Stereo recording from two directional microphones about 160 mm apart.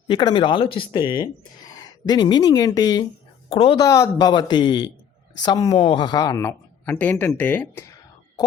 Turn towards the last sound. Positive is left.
turn(degrees=10)  # may be behind; listen again after turning